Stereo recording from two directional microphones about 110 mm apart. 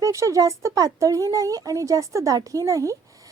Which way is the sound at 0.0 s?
30° right (ahead or behind).